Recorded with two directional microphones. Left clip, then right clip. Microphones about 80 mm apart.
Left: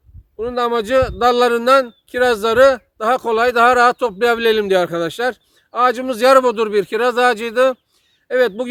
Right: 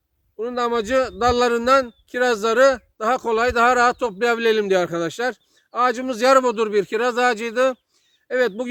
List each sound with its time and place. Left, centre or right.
0.3 s speech: left